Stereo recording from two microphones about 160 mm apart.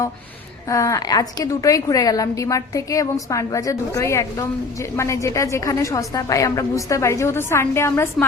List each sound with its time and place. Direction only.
0.7 s a woman's voice: 20° left (ahead or behind)